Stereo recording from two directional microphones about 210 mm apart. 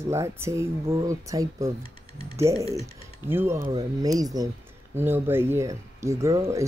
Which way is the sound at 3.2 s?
10° right (ahead or behind).